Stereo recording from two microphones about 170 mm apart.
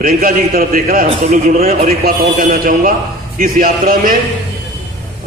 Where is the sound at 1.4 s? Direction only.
45° right (ahead or behind).